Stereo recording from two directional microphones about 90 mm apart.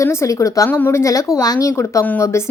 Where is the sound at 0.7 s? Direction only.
20° left (ahead or behind).